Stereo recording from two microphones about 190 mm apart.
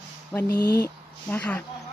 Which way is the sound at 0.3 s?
15° left (ahead or behind).